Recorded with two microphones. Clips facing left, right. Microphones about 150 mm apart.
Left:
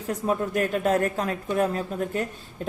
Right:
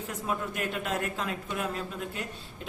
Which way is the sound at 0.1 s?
40° left (ahead or behind).